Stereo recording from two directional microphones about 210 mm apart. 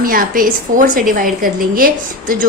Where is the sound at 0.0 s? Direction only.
40° right (ahead or behind).